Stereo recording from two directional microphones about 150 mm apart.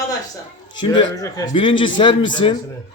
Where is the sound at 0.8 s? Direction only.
25° left (ahead or behind).